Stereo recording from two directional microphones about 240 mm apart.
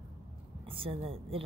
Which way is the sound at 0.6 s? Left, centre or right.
Right.